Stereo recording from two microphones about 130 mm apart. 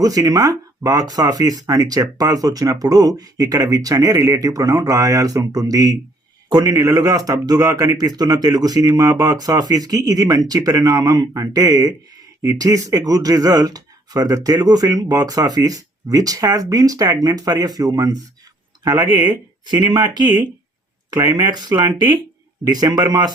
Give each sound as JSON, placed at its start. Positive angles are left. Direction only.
{"t": 0.0, "sound": "speech", "side_deg": -30}